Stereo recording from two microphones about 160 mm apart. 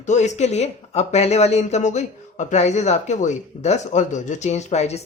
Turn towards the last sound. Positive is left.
turn(degrees=45)  # may be behind; listen again after turning